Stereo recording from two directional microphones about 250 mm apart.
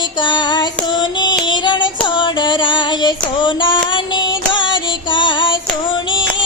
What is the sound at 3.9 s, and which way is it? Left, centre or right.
Music, centre.